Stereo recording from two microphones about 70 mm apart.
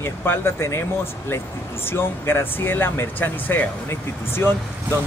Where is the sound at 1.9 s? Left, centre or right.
Left.